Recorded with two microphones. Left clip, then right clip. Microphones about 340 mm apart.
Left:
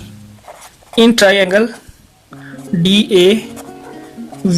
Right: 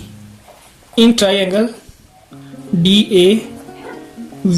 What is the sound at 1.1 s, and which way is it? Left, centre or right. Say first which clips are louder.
Speech: left 4 dB; left.